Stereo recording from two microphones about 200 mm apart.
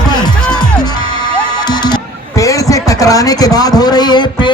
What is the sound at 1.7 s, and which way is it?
Music, 20° left (ahead or behind).